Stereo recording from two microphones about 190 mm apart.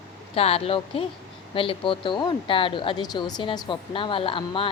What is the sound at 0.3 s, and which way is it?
A woman's voice, 30° left (ahead or behind).